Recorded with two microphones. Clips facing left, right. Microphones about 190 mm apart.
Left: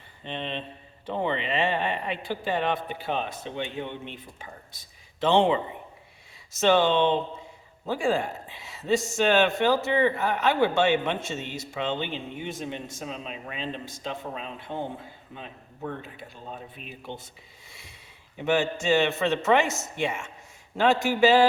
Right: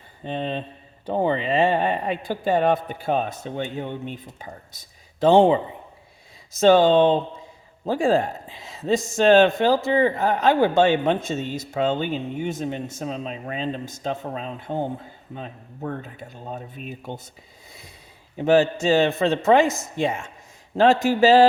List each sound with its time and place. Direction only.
0.3 s speech: 40° right (ahead or behind)
5.2 s speech: 35° right (ahead or behind)
6.6 s speech: 35° right (ahead or behind)
18.3 s speech: 35° right (ahead or behind)